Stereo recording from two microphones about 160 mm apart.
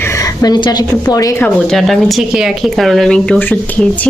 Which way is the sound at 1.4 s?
Centre (ahead or behind).